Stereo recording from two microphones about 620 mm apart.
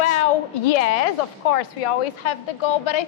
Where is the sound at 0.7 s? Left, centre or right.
Left.